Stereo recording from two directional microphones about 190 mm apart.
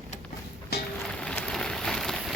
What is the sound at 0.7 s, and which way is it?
Music, 55° left (ahead or behind).